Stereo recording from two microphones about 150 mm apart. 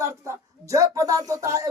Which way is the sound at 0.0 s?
20° right (ahead or behind).